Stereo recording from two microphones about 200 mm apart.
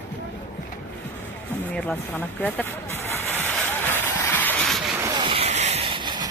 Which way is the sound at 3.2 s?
10° left (ahead or behind).